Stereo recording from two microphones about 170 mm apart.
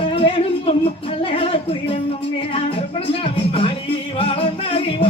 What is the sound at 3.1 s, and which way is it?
Music, 35° left (ahead or behind).